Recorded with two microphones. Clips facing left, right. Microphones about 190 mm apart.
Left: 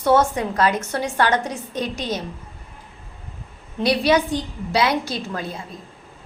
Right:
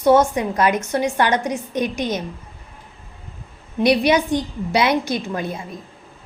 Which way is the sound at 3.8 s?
20° right (ahead or behind).